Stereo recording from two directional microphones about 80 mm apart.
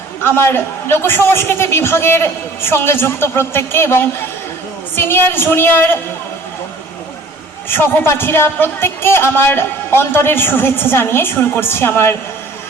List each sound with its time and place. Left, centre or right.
0.2 s a woman's voice: left
7.7 s a woman's voice: left